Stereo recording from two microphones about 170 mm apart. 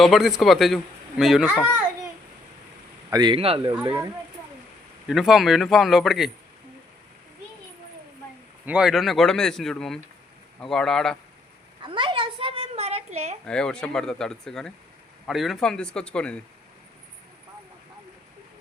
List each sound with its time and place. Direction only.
0.0 s speech: centre (ahead or behind)
3.1 s speech: 25° right (ahead or behind)
5.0 s speech: centre (ahead or behind)
8.6 s speech: 5° right (ahead or behind)
11.8 s a sound: 30° right (ahead or behind)
13.4 s speech: 5° left (ahead or behind)